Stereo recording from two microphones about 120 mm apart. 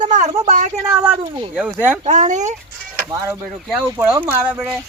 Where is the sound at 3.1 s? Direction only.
25° right (ahead or behind).